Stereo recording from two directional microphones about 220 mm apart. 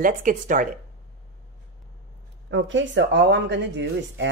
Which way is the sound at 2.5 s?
60° right (ahead or behind).